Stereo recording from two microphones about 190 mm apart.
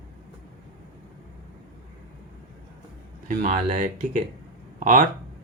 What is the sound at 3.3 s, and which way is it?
Speech, 40° right (ahead or behind).